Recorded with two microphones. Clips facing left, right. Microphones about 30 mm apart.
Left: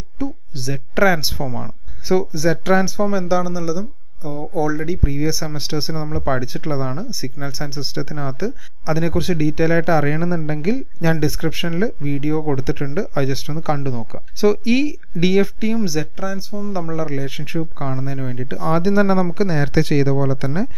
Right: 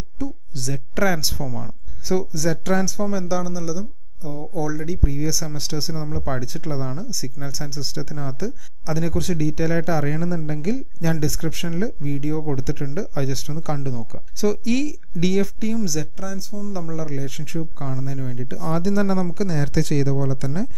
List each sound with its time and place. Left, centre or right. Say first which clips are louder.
0.2 s speech: left 4 dB; left